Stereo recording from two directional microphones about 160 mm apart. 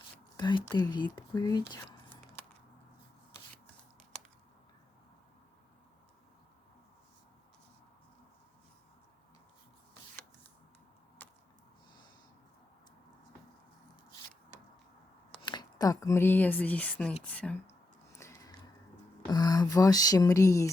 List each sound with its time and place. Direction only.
0.3 s speech: 30° left (ahead or behind)
2.0 s scissors: 10° left (ahead or behind)
11.2 s a sound: 10° left (ahead or behind)
15.4 s speech: 30° left (ahead or behind); by 17.6 s 10° left (ahead or behind)
18.2 s a sound: 20° left (ahead or behind)
19.3 s speech: 25° left (ahead or behind)